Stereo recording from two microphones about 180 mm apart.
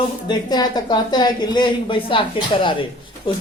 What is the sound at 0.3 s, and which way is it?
Speech, 20° left (ahead or behind).